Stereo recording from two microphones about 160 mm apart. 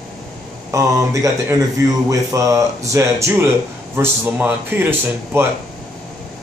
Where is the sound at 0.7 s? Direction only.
20° right (ahead or behind).